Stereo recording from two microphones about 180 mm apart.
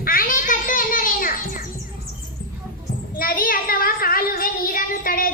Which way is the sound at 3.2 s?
55° left (ahead or behind).